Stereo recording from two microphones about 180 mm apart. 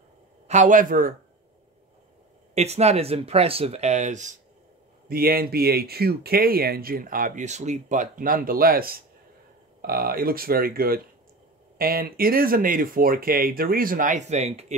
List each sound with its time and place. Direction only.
0.5 s speech: 45° right (ahead or behind)
2.5 s speech: 35° right (ahead or behind)
5.0 s speech: 55° right (ahead or behind); by 14.8 s 40° right (ahead or behind)